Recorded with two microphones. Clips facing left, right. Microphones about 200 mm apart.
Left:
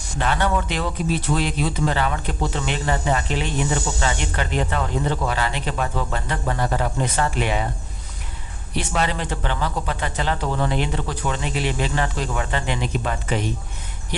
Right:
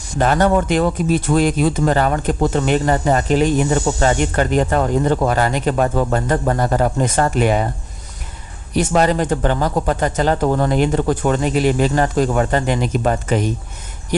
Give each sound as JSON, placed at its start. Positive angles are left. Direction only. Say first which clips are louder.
{"t": 0.2, "sound": "speech", "louder": "right 7 dB", "side_deg": -45}
{"t": 8.7, "sound": "speech", "louder": "right 9 dB", "side_deg": -45}